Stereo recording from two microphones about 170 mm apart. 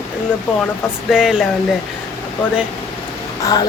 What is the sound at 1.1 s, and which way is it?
Speech, 5° right (ahead or behind).